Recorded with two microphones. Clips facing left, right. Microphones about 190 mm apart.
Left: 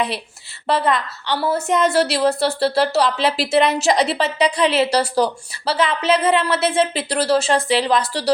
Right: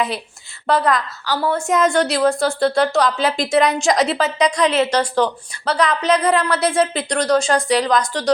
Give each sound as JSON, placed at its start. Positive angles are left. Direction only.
{"t": 0.7, "sound": "speech", "side_deg": 0}
{"t": 4.6, "sound": "a woman's voice", "side_deg": 30}
{"t": 5.6, "sound": "speech", "side_deg": 5}
{"t": 6.2, "sound": "speech", "side_deg": 25}
{"t": 6.6, "sound": "a woman's voice", "side_deg": 5}